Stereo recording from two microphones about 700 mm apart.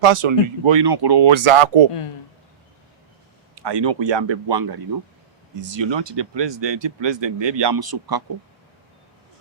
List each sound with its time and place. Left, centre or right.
0.0 s speech: right
1.9 s speech: left
3.5 s speech: right